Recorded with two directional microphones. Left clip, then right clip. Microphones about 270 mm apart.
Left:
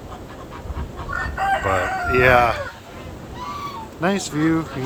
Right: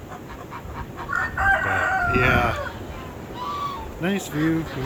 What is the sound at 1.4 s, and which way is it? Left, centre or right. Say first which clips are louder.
Chicken: left 1 dB; left.